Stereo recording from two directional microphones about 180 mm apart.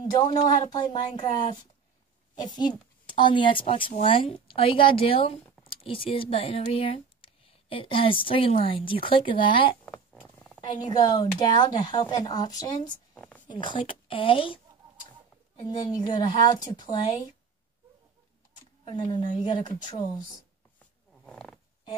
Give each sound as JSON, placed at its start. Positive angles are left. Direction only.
{"t": 0.2, "sound": "a woman's voice", "side_deg": 30}
{"t": 10.2, "sound": "roaring cats", "side_deg": 5}
{"t": 10.7, "sound": "speech", "side_deg": 25}
{"t": 13.1, "sound": "a sound", "side_deg": 5}
{"t": 13.5, "sound": "speech", "side_deg": 25}
{"t": 15.9, "sound": "speech", "side_deg": 25}
{"t": 18.9, "sound": "speech", "side_deg": 25}
{"t": 20.8, "sound": "purr", "side_deg": 0}